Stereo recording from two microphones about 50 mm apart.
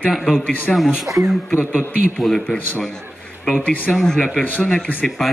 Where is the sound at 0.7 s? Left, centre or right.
Centre.